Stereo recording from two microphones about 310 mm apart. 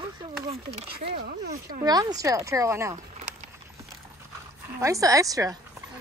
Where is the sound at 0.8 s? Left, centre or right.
Right.